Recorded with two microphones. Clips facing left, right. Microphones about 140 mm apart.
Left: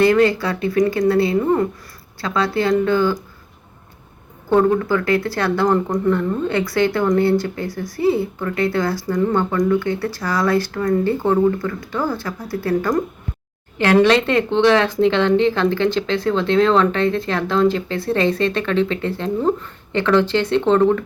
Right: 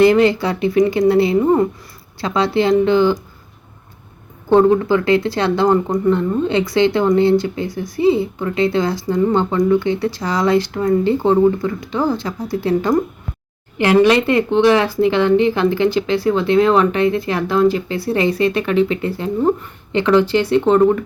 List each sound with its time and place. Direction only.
0.0 s speech: 25° right (ahead or behind)
4.4 s speech: 25° right (ahead or behind)